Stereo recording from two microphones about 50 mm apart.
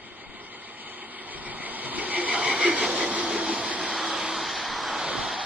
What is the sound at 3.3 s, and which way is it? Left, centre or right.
Train, centre.